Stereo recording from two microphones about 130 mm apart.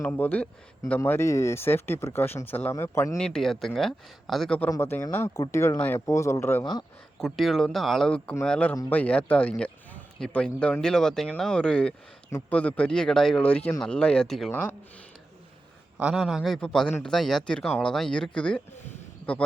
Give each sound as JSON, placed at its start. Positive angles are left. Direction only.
{"t": 0.0, "sound": "speech", "side_deg": 10}
{"t": 3.2, "sound": "speech", "side_deg": 5}
{"t": 4.7, "sound": "speech", "side_deg": 20}
{"t": 7.2, "sound": "speech", "side_deg": 0}
{"t": 14.5, "sound": "speech", "side_deg": 15}
{"t": 16.0, "sound": "a man's voice", "side_deg": -5}